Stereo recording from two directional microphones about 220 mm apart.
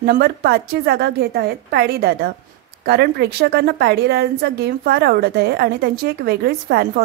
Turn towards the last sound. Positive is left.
turn(degrees=-45)  # may be behind; listen again after turning